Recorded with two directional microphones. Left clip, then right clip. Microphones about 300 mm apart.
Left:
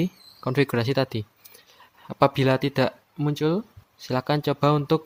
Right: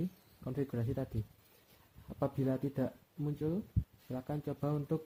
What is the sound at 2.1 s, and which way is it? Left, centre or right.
Speech, left.